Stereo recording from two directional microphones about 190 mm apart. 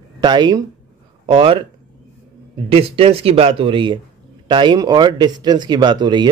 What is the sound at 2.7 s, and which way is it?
Speech, 30° right (ahead or behind).